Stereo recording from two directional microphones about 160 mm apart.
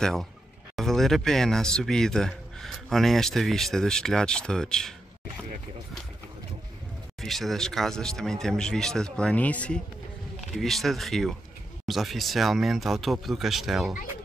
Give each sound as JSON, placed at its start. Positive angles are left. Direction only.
{"t": 0.0, "sound": "speech", "side_deg": 0}
{"t": 7.2, "sound": "speech", "side_deg": 0}